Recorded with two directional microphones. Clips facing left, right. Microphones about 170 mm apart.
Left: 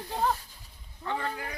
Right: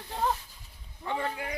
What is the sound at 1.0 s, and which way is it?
Speech, 15° right (ahead or behind).